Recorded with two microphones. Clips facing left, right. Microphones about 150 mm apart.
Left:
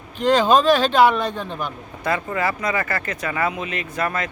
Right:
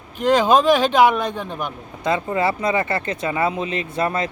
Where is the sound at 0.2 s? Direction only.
10° right (ahead or behind).